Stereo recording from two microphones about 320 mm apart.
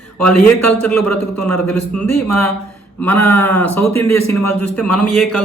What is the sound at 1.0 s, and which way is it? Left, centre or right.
Speech, left.